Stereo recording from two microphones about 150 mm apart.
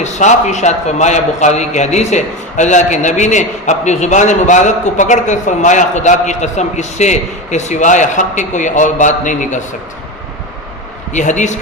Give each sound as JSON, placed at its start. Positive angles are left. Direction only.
{"t": 0.0, "sound": "a man's voice", "side_deg": 50}
{"t": 11.1, "sound": "a man's voice", "side_deg": 55}